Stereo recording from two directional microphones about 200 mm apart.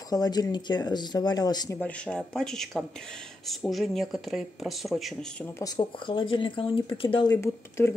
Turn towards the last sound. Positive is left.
turn(degrees=15)  # may be behind; listen again after turning